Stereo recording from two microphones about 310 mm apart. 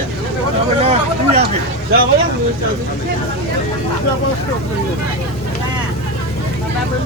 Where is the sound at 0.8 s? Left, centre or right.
Centre.